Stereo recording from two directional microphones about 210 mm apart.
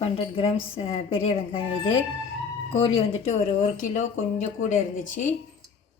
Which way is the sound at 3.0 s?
30° left (ahead or behind).